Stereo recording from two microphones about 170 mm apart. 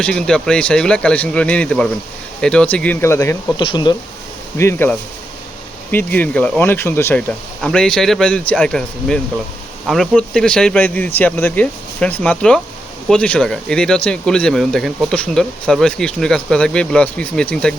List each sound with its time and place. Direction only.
0.0 s speech: 5° left (ahead or behind)
3.6 s speech: 25° left (ahead or behind)
4.5 s speech: 15° left (ahead or behind)